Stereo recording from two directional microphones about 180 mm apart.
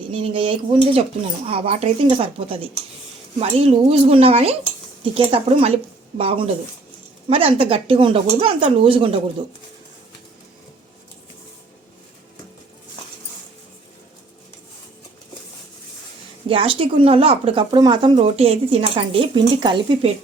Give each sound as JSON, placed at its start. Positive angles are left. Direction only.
{"t": 0.1, "sound": "speech", "side_deg": -30}
{"t": 16.5, "sound": "speech", "side_deg": -30}